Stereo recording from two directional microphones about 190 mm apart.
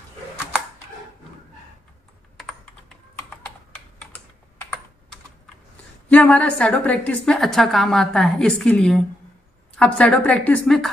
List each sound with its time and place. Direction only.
6.0 s a woman's voice: 5° left (ahead or behind)